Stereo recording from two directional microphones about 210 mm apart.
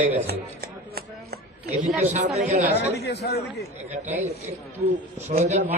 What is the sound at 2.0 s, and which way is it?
Speech, 35° right (ahead or behind).